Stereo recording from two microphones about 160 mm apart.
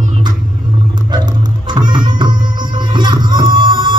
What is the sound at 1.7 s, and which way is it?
Music, 30° right (ahead or behind).